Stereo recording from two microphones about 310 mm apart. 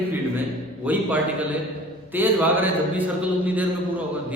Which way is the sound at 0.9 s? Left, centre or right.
Centre.